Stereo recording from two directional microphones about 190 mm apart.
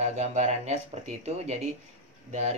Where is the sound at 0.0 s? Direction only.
35° right (ahead or behind).